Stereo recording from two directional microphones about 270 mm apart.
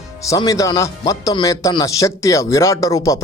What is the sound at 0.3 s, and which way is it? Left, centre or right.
Speech, centre.